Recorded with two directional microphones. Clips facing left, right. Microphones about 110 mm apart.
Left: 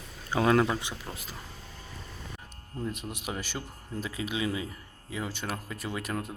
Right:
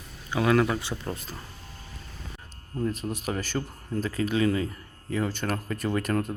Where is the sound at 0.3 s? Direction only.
30° left (ahead or behind).